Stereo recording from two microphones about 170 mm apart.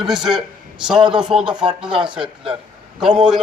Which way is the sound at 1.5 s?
25° right (ahead or behind).